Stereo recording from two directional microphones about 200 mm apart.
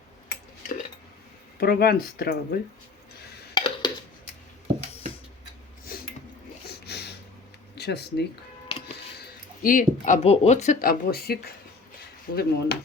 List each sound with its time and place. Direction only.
1.5 s speech: 50° left (ahead or behind)
3.5 s a sound: 25° left (ahead or behind)
6.7 s a sound: 55° left (ahead or behind)
7.8 s speech: 55° left (ahead or behind)
8.7 s music: 30° left (ahead or behind)
9.6 s speech: 40° left (ahead or behind)